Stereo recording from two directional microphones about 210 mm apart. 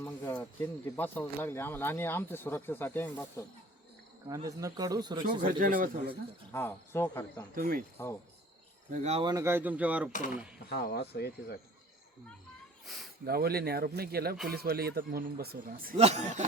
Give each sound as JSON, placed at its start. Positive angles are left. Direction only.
{"t": 0.0, "sound": "speech", "side_deg": 10}
{"t": 4.4, "sound": "speech", "side_deg": -15}
{"t": 5.4, "sound": "a man's voice", "side_deg": -40}
{"t": 6.5, "sound": "speech", "side_deg": 10}
{"t": 7.5, "sound": "speech", "side_deg": -45}
{"t": 8.9, "sound": "speech", "side_deg": -30}
{"t": 9.3, "sound": "speech", "side_deg": -10}
{"t": 10.1, "sound": "speech", "side_deg": 35}
{"t": 10.7, "sound": "speech", "side_deg": 50}
{"t": 12.8, "sound": "speech", "side_deg": 0}
{"t": 13.2, "sound": "speech", "side_deg": -45}
{"t": 16.0, "sound": "a man's voice", "side_deg": -30}